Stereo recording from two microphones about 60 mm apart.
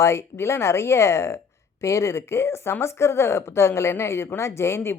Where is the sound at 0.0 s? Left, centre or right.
Left.